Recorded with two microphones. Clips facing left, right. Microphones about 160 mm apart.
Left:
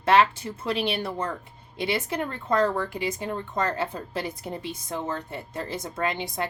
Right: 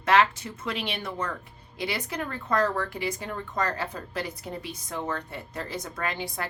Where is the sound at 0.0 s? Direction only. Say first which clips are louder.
Left 2 dB; 30° left (ahead or behind).